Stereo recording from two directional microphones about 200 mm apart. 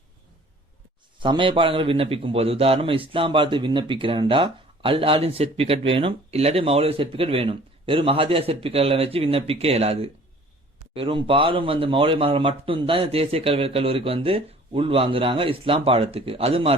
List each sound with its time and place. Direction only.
1.2 s a man's voice: 25° right (ahead or behind)